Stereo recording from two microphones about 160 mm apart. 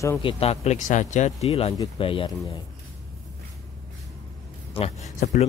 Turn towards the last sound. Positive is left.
turn(degrees=40)  # may be behind; listen again after turning